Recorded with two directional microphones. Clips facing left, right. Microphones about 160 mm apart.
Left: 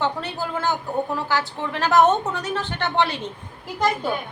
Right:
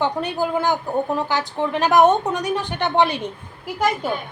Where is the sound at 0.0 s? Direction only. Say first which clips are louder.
Right 4 dB; 15° right (ahead or behind).